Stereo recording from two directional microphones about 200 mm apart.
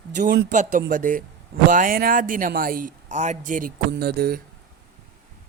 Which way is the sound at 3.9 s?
55° right (ahead or behind).